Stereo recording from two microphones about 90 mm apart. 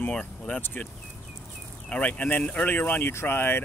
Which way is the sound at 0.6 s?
20° left (ahead or behind).